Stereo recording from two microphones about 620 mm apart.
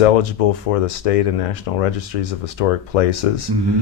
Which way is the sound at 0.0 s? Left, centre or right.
Left.